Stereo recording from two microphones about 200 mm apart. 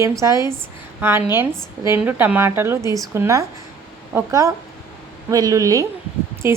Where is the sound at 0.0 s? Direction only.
15° right (ahead or behind).